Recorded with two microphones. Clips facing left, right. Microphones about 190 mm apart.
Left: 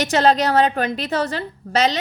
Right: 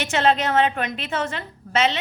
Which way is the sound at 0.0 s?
40° left (ahead or behind).